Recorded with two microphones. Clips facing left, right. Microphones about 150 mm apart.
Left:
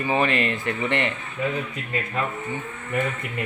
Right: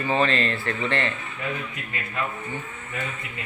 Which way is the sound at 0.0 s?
15° left (ahead or behind).